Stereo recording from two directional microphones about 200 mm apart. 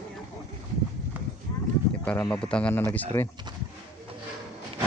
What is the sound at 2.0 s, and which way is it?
Speech, 10° left (ahead or behind).